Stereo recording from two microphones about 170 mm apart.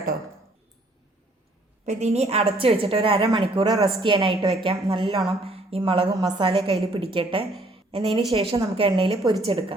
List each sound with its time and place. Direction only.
1.8 s a woman's voice: 40° right (ahead or behind)